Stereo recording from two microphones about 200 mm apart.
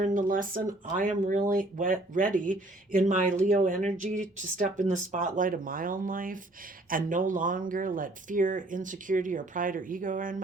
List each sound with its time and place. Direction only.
0.0 s speech: 40° right (ahead or behind)